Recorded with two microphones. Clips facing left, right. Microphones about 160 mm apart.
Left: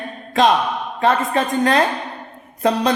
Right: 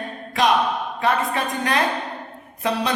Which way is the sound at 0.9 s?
45° left (ahead or behind).